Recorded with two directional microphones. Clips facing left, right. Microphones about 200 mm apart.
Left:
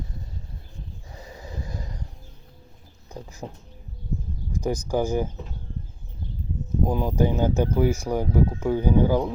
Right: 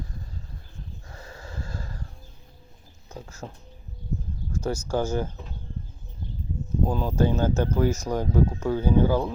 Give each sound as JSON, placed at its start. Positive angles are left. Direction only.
{"t": 1.1, "sound": "a sound", "side_deg": 15}
{"t": 3.2, "sound": "speech", "side_deg": 15}
{"t": 4.5, "sound": "speech", "side_deg": 15}
{"t": 6.8, "sound": "speech", "side_deg": 15}